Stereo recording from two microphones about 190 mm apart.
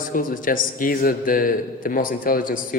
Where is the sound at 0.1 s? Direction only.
45° left (ahead or behind).